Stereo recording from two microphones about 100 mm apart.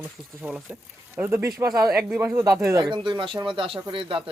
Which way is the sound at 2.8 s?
55° right (ahead or behind).